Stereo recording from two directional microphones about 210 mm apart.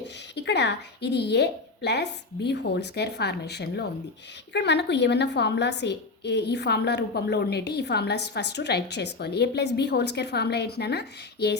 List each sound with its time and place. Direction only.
0.3 s a woman's voice: 55° left (ahead or behind)